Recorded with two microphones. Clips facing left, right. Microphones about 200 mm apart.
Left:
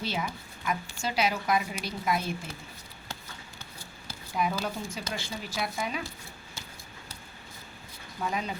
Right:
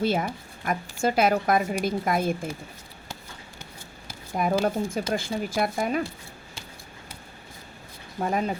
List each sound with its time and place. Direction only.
0.0 s speech: 50° right (ahead or behind)
4.3 s speech: 45° right (ahead or behind)
8.2 s speech: 50° right (ahead or behind)